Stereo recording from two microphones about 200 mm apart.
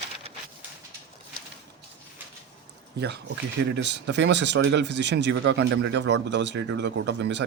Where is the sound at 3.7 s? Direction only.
60° right (ahead or behind).